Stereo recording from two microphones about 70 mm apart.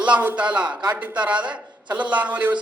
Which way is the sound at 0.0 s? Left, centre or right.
Right.